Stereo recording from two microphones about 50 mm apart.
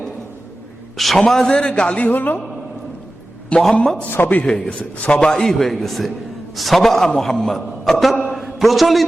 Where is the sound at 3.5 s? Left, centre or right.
Centre.